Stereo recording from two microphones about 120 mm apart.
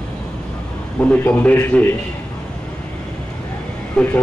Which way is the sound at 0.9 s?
15° left (ahead or behind).